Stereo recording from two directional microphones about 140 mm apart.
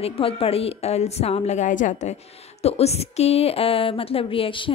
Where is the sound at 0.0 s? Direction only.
45° left (ahead or behind); by 2.1 s 60° left (ahead or behind).